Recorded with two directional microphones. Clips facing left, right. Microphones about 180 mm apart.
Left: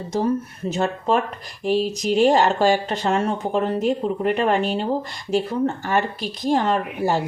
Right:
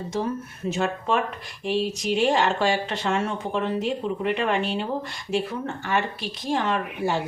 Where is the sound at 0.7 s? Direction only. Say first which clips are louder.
Left 3 dB; 35° left (ahead or behind).